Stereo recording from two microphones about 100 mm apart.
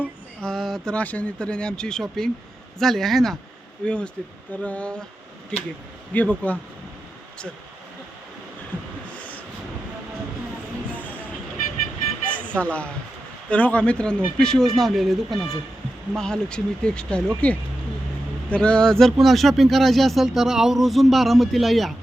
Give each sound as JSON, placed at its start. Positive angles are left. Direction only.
{"t": 0.4, "sound": "speech", "side_deg": 0}
{"t": 0.9, "sound": "speech", "side_deg": 15}
{"t": 10.8, "sound": "vehicle", "side_deg": 15}
{"t": 12.3, "sound": "vehicle", "side_deg": 15}
{"t": 13.5, "sound": "speech", "side_deg": 15}